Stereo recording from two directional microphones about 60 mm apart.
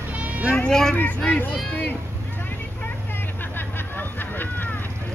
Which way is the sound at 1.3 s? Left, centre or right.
Left.